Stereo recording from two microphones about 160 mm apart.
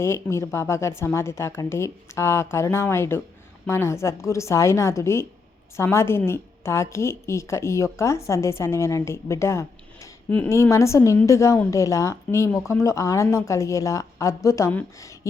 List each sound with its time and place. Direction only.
0.0 s a woman's voice: 15° left (ahead or behind)